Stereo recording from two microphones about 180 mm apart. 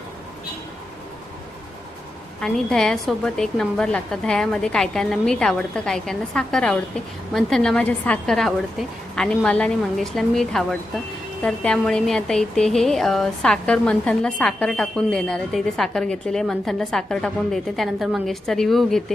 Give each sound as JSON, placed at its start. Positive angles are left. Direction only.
{"t": 2.4, "sound": "speech", "side_deg": 5}